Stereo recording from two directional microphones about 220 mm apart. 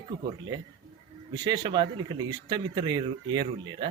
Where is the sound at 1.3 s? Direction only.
20° right (ahead or behind).